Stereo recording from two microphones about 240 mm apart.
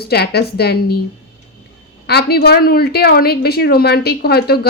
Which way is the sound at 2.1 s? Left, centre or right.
Left.